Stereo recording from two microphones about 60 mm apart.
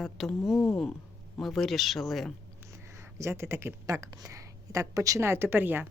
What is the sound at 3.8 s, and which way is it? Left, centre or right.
A woman's voice, right.